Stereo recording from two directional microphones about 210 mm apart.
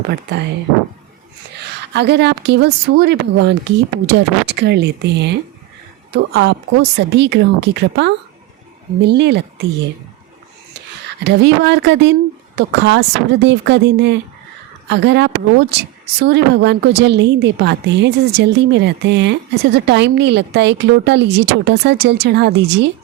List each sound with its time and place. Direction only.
0.1 s speech: 55° right (ahead or behind)
1.9 s speech: 55° right (ahead or behind)
11.2 s a woman's voice: 55° right (ahead or behind)